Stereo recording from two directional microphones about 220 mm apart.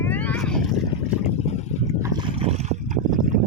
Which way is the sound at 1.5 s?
30° left (ahead or behind).